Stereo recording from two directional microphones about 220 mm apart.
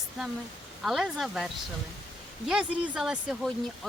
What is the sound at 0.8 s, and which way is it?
Speech, centre (ahead or behind).